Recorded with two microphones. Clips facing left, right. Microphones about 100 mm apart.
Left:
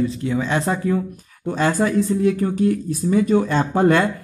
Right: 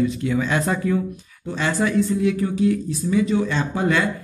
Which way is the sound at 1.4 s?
45° left (ahead or behind).